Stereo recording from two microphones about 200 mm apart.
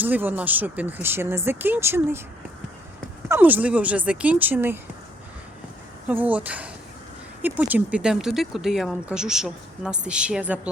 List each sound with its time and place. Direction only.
0.0 s speech: 10° right (ahead or behind)
3.2 s speech: 10° right (ahead or behind)
6.1 s speech: 10° right (ahead or behind)